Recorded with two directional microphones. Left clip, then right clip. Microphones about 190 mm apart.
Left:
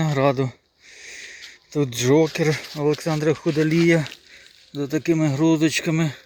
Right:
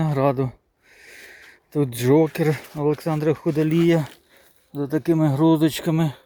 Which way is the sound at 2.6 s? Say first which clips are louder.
Left 1 dB; 10° right (ahead or behind).